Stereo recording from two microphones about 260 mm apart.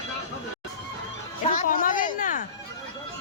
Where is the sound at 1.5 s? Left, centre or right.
Left.